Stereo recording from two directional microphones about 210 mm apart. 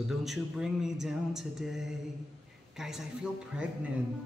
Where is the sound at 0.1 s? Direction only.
Centre (ahead or behind).